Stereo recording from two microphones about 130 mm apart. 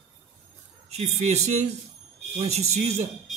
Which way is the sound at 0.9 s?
60° right (ahead or behind).